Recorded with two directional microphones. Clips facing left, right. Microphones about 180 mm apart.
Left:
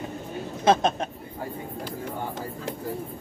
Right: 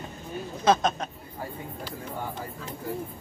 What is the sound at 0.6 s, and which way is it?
Speech, 25° left (ahead or behind).